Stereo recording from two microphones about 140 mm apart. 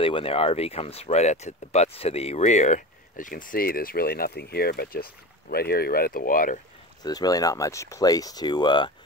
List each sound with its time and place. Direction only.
0.0 s speech: 40° left (ahead or behind); by 6.6 s 75° left (ahead or behind)
7.0 s speech: 25° left (ahead or behind)